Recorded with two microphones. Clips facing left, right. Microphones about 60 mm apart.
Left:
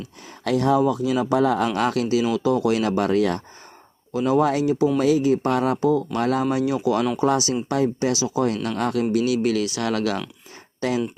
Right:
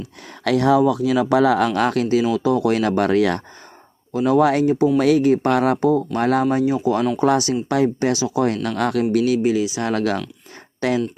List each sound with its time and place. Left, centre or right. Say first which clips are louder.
0.4 s speech: right 3 dB; right
4.6 s speech: right 3 dB; right
4.9 s speech: right 3 dB; right
5.7 s speech: right 2 dB; right
6.5 s speech: right 3 dB; right
7.2 s speech: right 3 dB; right
9.4 s speech: right 3 dB; centre
9.8 s speech: right 1 dB; right
10.8 s speech: right 3 dB; right